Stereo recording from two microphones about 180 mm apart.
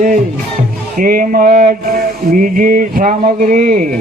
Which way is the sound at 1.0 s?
50° right (ahead or behind).